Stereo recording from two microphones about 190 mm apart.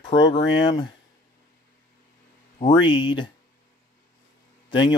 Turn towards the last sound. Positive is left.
turn(degrees=25)  # may be behind; listen again after turning